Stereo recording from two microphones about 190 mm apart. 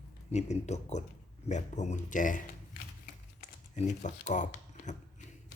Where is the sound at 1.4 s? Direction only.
40° left (ahead or behind).